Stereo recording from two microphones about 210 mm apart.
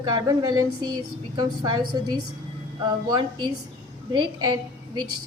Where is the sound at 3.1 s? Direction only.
20° right (ahead or behind).